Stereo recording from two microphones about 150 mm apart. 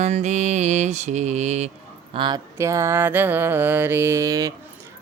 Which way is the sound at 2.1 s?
35° right (ahead or behind).